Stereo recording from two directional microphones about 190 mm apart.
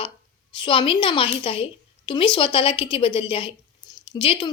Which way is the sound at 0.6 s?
25° left (ahead or behind).